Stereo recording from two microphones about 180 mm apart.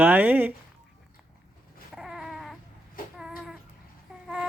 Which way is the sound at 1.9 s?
Centre (ahead or behind).